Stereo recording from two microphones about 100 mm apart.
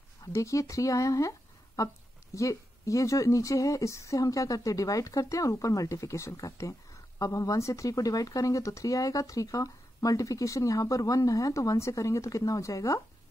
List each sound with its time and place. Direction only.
0.2 s speech: 35° left (ahead or behind)